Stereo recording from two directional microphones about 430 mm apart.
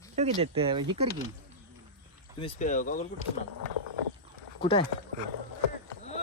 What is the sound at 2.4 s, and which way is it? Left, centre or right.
Speech, centre.